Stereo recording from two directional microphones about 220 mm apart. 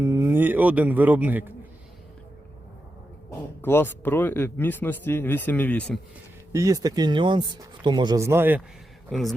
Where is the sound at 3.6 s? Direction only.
10° left (ahead or behind).